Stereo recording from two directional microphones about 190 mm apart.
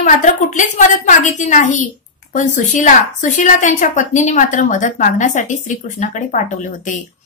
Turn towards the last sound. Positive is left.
turn(degrees=40)  # may be behind; listen again after turning